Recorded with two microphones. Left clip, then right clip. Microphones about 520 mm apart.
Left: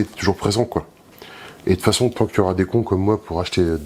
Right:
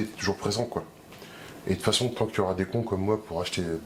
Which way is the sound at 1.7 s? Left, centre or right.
Left.